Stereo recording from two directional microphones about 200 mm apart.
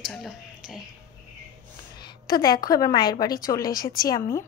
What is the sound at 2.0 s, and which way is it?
A woman's voice, 20° left (ahead or behind).